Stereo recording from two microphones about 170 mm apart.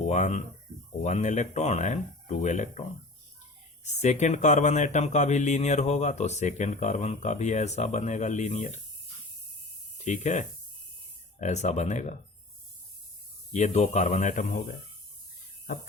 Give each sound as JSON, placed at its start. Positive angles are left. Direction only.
{"t": 0.0, "sound": "speech", "side_deg": 45}
{"t": 3.8, "sound": "speech", "side_deg": 40}
{"t": 10.0, "sound": "speech", "side_deg": 45}
{"t": 13.5, "sound": "speech", "side_deg": 40}